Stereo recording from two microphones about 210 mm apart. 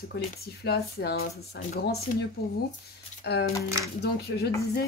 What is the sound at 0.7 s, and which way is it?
Speech, 50° left (ahead or behind).